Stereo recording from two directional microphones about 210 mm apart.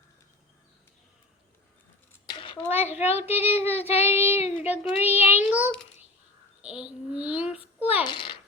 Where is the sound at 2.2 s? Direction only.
25° left (ahead or behind).